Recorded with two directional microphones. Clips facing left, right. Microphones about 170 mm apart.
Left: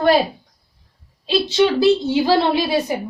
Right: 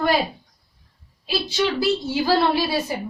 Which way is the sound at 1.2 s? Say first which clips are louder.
Left 7 dB; 25° left (ahead or behind).